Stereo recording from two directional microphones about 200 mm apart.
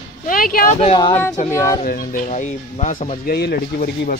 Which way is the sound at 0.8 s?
30° left (ahead or behind).